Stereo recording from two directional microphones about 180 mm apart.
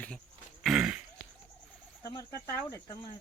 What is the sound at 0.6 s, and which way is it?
Cough, 5° right (ahead or behind).